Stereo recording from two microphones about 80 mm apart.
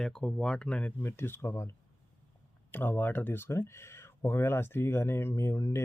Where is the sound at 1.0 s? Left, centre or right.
Left.